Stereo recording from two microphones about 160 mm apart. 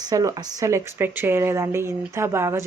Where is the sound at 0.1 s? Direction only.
20° right (ahead or behind).